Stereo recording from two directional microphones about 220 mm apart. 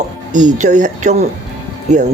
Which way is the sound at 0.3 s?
35° right (ahead or behind).